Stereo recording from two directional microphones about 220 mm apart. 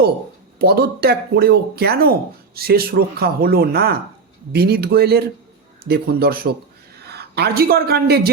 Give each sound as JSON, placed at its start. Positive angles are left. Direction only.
{"t": 0.6, "sound": "a man's voice", "side_deg": -45}